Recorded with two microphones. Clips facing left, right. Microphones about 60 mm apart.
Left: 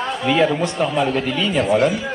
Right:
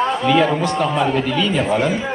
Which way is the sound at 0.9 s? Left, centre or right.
Centre.